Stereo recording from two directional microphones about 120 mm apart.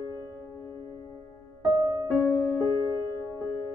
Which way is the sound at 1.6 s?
35° right (ahead or behind).